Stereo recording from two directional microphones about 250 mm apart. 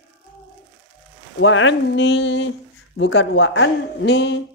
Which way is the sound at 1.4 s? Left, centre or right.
Left.